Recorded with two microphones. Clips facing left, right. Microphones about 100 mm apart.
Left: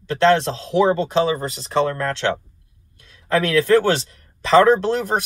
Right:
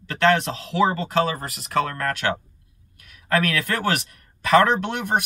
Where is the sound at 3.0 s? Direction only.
25° left (ahead or behind).